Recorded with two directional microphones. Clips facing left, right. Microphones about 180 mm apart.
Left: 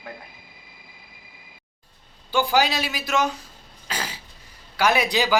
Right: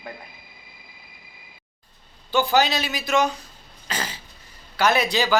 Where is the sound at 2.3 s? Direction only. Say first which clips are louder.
Right 1 dB; 10° left (ahead or behind).